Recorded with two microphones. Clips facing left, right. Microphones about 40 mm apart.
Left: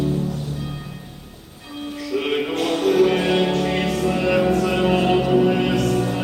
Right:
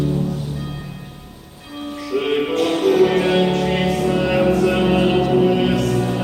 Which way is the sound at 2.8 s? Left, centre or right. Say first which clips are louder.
Right 1 dB; centre.